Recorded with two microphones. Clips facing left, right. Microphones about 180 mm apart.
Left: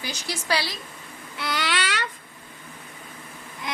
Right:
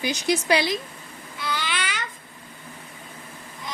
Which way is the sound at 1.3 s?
75° left (ahead or behind).